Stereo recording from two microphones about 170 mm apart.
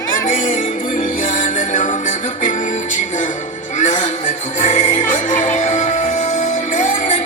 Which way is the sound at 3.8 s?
45° left (ahead or behind).